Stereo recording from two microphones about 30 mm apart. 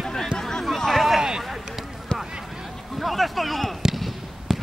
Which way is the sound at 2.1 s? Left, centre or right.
Left.